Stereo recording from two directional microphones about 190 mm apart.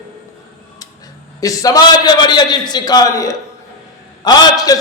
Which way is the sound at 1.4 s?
20° left (ahead or behind).